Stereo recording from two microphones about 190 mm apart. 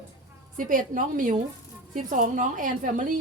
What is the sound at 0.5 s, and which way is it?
A woman's voice, 45° right (ahead or behind).